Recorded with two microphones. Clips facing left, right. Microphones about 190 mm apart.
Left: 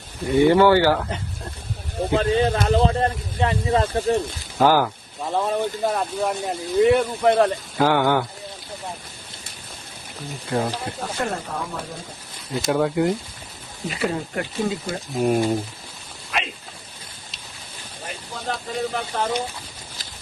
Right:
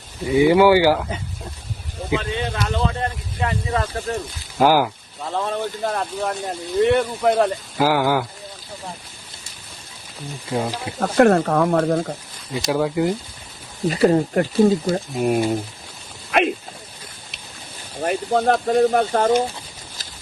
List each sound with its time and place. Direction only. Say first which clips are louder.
0.3 s speech: right 1 dB; 5° right (ahead or behind)
2.1 s speech: left 4 dB; 40° left (ahead or behind)
4.5 s speech: right 1 dB; 10° right (ahead or behind)
5.2 s speech: left 2 dB; 15° left (ahead or behind); by 8.3 s 5° right (ahead or behind)
10.5 s speech: even; 10° right (ahead or behind)
11.0 s speech: right 15 dB; 70° right (ahead or behind)
12.5 s speech: even; centre (ahead or behind)
13.8 s speech: right 9 dB; 40° right (ahead or behind)
15.1 s speech: left 2 dB; 5° right (ahead or behind)
16.3 s speech: right 10 dB; 60° right (ahead or behind)
18.0 s speech: right 13 dB; 60° right (ahead or behind)